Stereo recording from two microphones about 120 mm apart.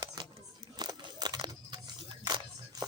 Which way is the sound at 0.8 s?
35° right (ahead or behind).